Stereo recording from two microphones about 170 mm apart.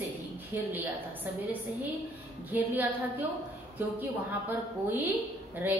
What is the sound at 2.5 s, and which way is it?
Speech, 10° right (ahead or behind).